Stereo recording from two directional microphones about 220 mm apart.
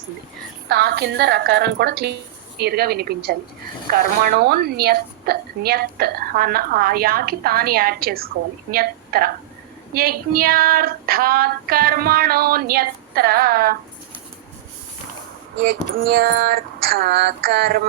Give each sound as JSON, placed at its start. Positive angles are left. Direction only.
{"t": 0.7, "sound": "a woman's voice", "side_deg": -50}
{"t": 16.0, "sound": "a woman's voice", "side_deg": -45}